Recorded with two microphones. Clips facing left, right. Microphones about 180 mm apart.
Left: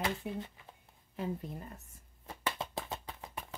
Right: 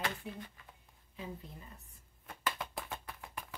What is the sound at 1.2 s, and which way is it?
Speech, 50° left (ahead or behind).